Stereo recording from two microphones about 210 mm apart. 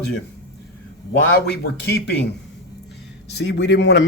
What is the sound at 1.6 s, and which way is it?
Speech, 50° left (ahead or behind).